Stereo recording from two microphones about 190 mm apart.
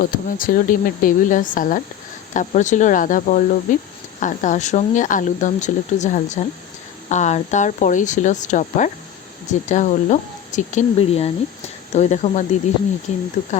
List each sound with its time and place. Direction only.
0.0 s speech: 45° left (ahead or behind)